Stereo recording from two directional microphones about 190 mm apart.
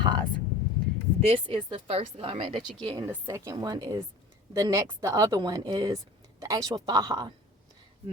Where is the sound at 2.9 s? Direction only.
15° right (ahead or behind).